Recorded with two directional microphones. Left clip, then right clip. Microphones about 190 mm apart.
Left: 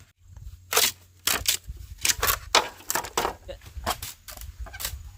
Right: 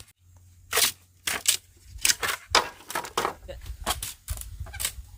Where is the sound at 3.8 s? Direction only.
5° right (ahead or behind).